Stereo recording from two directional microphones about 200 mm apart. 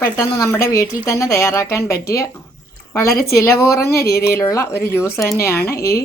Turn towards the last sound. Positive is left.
turn(degrees=15)  # may be behind; listen again after turning